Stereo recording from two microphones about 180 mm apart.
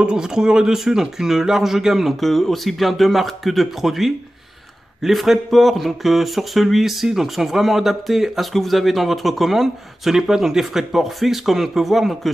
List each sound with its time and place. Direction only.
0.0 s speech: 5° right (ahead or behind)